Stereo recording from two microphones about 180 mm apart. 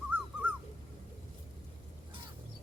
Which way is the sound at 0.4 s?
5° right (ahead or behind).